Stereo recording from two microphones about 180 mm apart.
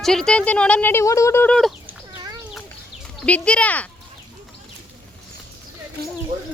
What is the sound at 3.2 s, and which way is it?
Speech, 5° left (ahead or behind).